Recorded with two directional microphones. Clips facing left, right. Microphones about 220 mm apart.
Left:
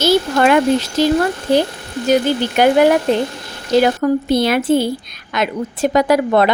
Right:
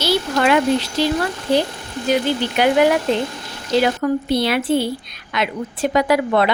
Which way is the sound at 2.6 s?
45° left (ahead or behind).